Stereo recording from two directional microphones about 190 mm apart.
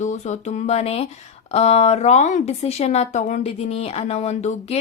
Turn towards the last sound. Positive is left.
turn(degrees=35)  # may be behind; listen again after turning